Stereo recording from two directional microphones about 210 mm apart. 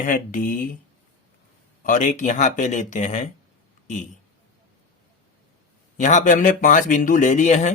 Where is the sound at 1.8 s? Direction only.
35° left (ahead or behind).